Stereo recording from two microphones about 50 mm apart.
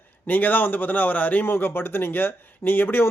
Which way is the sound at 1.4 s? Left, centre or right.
Left.